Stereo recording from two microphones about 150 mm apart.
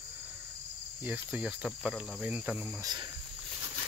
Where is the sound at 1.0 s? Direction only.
10° right (ahead or behind).